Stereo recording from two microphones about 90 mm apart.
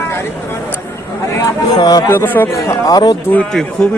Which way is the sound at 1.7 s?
45° left (ahead or behind).